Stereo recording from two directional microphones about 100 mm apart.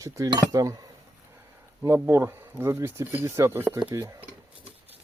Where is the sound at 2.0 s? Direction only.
25° right (ahead or behind).